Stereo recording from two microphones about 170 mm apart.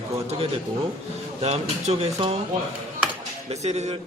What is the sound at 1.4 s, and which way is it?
Speech, 40° right (ahead or behind).